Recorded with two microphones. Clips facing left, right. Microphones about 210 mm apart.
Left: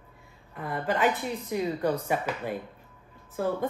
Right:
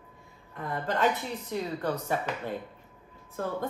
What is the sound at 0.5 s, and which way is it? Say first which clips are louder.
A woman's voice: left 2 dB; 5° left (ahead or behind).